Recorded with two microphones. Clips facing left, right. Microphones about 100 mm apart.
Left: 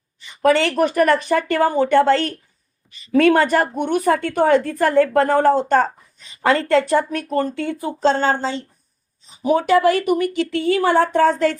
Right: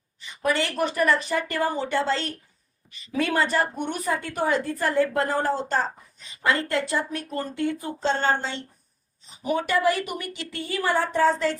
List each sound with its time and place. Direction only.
0.4 s a woman's voice: 70° left (ahead or behind)
6.4 s speech: 80° left
9.5 s a woman's voice: 90° left; by 11.5 s 60° left (ahead or behind)